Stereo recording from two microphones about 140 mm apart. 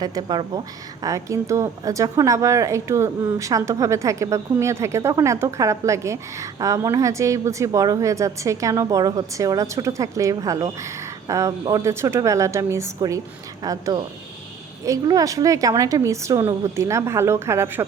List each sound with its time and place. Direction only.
0.0 s a woman's voice: 30° right (ahead or behind)